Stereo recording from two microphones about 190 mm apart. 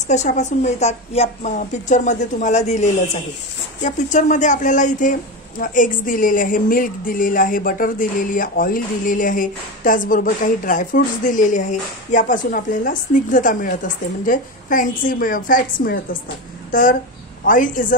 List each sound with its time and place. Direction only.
0.0 s a woman's voice: 40° left (ahead or behind)
17.5 s speech: 45° left (ahead or behind)